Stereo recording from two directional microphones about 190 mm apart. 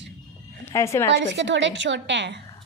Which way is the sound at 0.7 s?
15° left (ahead or behind).